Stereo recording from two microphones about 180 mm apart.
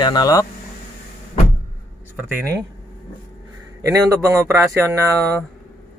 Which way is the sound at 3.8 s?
15° right (ahead or behind).